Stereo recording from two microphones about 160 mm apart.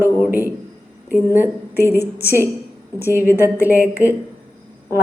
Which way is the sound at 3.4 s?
10° right (ahead or behind).